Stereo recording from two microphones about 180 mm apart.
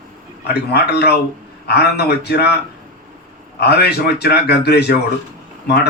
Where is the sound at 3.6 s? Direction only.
65° left (ahead or behind).